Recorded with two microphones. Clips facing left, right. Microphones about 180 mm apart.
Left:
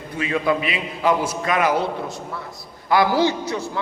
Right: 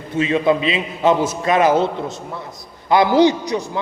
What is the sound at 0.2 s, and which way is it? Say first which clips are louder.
A man's voice: right 5 dB; 25° right (ahead or behind).